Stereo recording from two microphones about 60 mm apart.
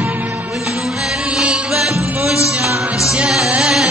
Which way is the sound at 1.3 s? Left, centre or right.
Centre.